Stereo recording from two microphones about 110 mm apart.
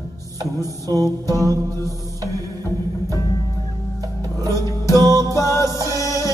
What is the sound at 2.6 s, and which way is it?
Music, 30° left (ahead or behind).